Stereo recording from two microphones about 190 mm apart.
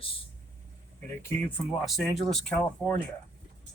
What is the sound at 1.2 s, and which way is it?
Speech, 10° left (ahead or behind).